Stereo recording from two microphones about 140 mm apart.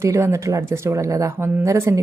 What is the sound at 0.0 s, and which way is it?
A woman's voice, 20° right (ahead or behind).